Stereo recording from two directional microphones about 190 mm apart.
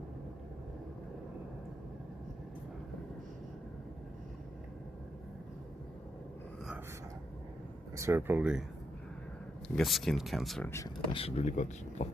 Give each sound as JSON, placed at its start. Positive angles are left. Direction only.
{"t": 7.9, "sound": "speech", "side_deg": -15}
{"t": 9.6, "sound": "speech", "side_deg": 0}
{"t": 10.7, "sound": "speech", "side_deg": 15}
{"t": 11.1, "sound": "speech", "side_deg": 30}